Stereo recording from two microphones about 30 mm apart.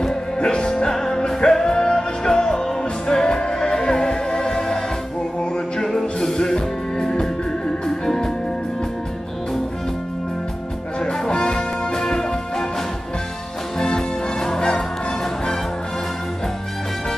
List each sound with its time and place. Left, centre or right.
0.4 s music: left
6.3 s music: left
11.1 s music: left
13.7 s music: left